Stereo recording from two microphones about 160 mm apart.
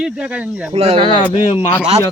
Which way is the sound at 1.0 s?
35° left (ahead or behind).